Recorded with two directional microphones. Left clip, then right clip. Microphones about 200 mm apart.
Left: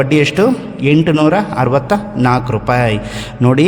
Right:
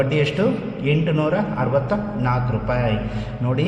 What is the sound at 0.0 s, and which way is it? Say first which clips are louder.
A man's voice: left 8 dB; 45° left (ahead or behind).